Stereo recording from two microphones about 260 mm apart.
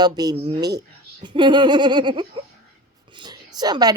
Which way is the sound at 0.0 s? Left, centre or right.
Centre.